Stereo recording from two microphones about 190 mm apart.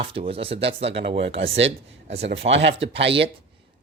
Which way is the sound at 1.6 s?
70° right (ahead or behind).